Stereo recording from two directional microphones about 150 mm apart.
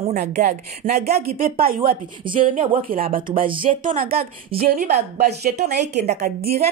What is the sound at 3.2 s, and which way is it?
A woman's voice, 35° right (ahead or behind).